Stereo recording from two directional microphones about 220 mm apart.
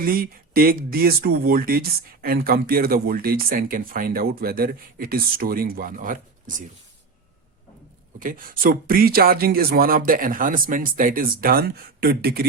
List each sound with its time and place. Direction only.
0.0 s speech: 40° right (ahead or behind)
8.2 s speech: 40° right (ahead or behind)